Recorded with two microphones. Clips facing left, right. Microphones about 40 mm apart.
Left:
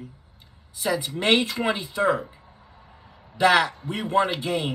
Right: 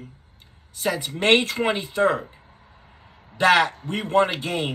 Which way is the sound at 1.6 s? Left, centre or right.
Right.